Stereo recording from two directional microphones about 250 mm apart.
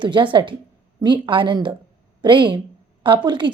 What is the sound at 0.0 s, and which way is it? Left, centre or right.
A woman's voice, centre.